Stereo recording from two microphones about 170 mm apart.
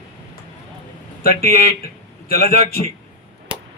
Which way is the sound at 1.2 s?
60° left (ahead or behind).